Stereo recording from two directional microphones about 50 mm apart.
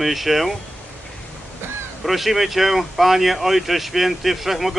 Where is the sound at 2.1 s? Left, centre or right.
Centre.